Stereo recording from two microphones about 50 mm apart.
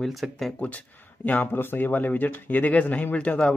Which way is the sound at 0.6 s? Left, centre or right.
Left.